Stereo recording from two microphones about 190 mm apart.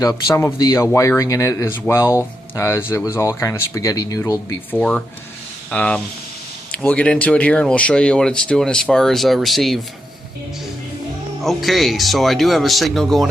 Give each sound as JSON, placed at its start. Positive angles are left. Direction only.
{"t": 0.0, "sound": "speech", "side_deg": 15}
{"t": 11.4, "sound": "speech", "side_deg": 0}